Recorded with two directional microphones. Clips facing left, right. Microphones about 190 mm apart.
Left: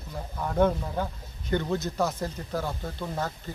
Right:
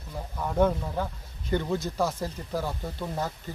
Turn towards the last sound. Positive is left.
turn(degrees=-5)  # may be behind; listen again after turning